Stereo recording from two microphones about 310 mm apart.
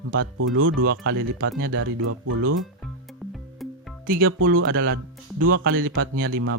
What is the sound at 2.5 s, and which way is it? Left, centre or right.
Music, centre.